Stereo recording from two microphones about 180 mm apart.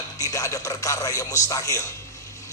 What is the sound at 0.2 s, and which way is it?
A man's voice, 15° left (ahead or behind).